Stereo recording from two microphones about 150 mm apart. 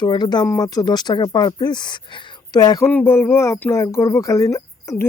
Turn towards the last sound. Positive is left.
turn(degrees=20)  # may be behind; listen again after turning